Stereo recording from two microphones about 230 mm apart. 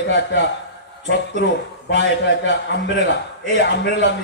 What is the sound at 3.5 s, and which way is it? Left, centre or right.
Speech, left.